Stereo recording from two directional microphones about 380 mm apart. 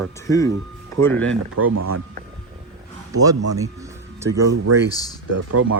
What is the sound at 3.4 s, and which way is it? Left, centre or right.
Speech, right.